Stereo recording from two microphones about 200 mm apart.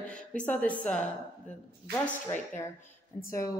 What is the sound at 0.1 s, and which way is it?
Speech, 5° left (ahead or behind).